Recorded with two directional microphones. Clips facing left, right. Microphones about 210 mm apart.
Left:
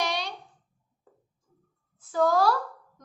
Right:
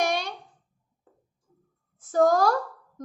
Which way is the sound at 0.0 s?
50° right (ahead or behind).